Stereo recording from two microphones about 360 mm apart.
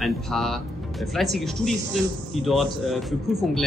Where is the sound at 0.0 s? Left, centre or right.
Centre.